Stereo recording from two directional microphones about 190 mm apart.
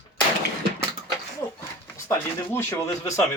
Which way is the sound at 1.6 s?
10° left (ahead or behind).